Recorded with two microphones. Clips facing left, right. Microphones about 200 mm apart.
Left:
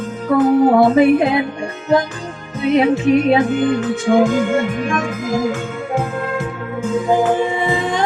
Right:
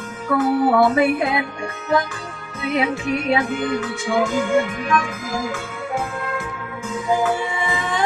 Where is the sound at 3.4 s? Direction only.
45° left (ahead or behind).